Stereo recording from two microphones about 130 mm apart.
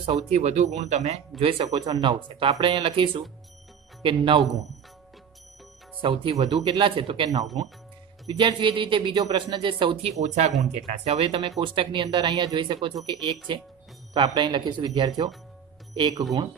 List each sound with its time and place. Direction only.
0.0 s speech: 55° right (ahead or behind)
1.4 s speech: 45° right (ahead or behind)
1.7 s speech: 30° right (ahead or behind)
5.9 s speech: 40° right (ahead or behind)
6.3 s speech: 30° right (ahead or behind)
6.8 s speech: 40° right (ahead or behind)
8.3 s speech: 35° right (ahead or behind)
10.2 s speech: 60° right (ahead or behind)
10.9 s speech: 50° right (ahead or behind); by 16.3 s 30° right (ahead or behind)